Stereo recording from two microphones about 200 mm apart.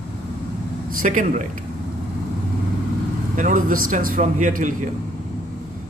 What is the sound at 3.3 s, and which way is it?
A man's voice, 40° right (ahead or behind).